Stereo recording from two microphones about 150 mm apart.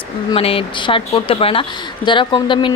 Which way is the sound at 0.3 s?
40° left (ahead or behind).